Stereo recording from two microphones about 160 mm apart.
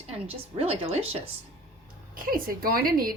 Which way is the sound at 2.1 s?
60° right (ahead or behind).